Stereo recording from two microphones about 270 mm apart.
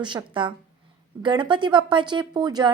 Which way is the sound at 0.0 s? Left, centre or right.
Centre.